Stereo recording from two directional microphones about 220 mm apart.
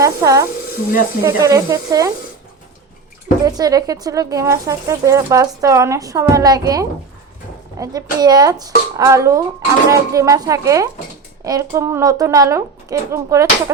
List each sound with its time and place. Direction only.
0.0 s speech: 15° right (ahead or behind)
3.3 s speech: 35° left (ahead or behind)
3.6 s speech: 15° right (ahead or behind)